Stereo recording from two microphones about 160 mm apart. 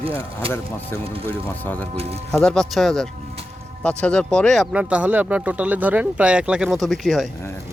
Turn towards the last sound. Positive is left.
turn(degrees=0)  # may be behind; listen again after turning